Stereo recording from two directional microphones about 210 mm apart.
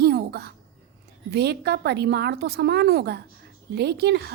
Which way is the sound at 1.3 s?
50° right (ahead or behind).